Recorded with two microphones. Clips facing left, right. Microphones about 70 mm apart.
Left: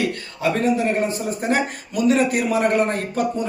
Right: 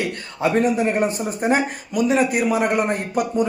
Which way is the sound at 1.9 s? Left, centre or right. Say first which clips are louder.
Even; centre.